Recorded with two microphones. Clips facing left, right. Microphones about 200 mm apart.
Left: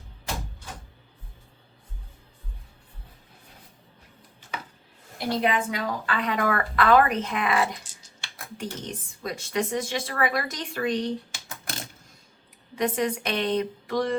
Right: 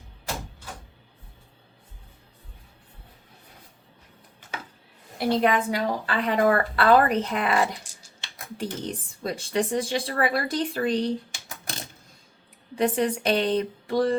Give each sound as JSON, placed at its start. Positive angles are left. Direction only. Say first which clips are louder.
{"t": 5.1, "sound": "a woman's voice", "louder": "right 3 dB", "side_deg": -50}
{"t": 5.7, "sound": "a woman's voice", "louder": "right 3 dB", "side_deg": -30}
{"t": 12.7, "sound": "a woman's voice", "louder": "right 2 dB", "side_deg": -30}